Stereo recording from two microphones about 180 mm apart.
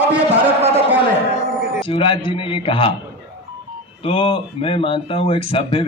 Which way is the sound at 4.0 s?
30° left (ahead or behind).